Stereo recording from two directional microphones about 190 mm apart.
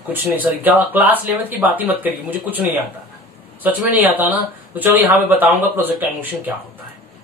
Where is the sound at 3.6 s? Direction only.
10° right (ahead or behind).